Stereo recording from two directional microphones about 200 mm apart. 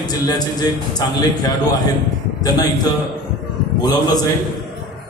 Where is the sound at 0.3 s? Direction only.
20° left (ahead or behind).